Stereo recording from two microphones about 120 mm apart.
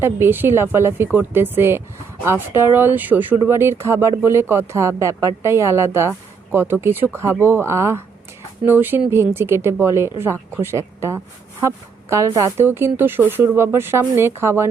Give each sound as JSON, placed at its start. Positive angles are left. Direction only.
{"t": 0.0, "sound": "speech", "side_deg": -20}